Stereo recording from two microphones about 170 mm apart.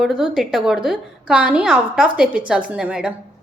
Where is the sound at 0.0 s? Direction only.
5° right (ahead or behind).